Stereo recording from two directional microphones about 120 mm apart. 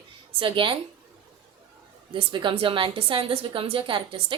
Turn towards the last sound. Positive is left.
turn(degrees=-45)  # may be behind; listen again after turning